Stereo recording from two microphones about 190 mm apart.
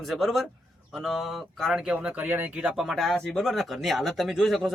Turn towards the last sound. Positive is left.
turn(degrees=0)  # may be behind; listen again after turning